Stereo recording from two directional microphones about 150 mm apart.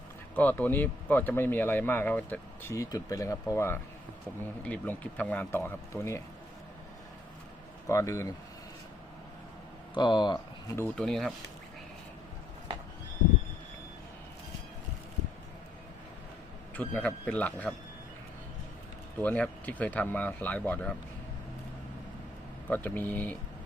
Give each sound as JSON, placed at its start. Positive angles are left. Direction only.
{"t": 0.3, "sound": "speech", "side_deg": 10}
{"t": 2.7, "sound": "speech", "side_deg": 20}
{"t": 7.9, "sound": "speech", "side_deg": 20}
{"t": 9.9, "sound": "speech", "side_deg": 30}
{"t": 10.8, "sound": "speech", "side_deg": 5}
{"t": 16.7, "sound": "speech", "side_deg": 10}
{"t": 19.2, "sound": "speech", "side_deg": 10}
{"t": 22.7, "sound": "speech", "side_deg": 10}